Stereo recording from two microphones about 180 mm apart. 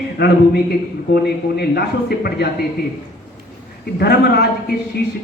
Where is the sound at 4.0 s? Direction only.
65° left (ahead or behind).